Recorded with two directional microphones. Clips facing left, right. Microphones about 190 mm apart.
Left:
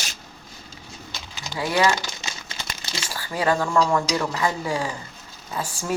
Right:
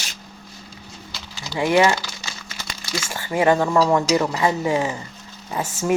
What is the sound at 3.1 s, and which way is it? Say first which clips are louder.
Speech: right 5 dB; 20° right (ahead or behind).